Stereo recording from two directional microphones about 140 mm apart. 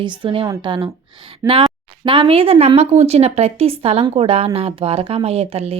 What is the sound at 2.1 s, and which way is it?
A woman's voice, 40° right (ahead or behind).